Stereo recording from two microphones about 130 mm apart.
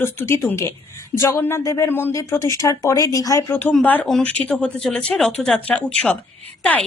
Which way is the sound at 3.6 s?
10° left (ahead or behind).